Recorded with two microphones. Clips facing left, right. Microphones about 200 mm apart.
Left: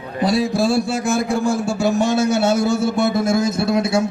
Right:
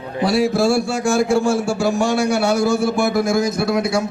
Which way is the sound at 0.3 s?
20° left (ahead or behind).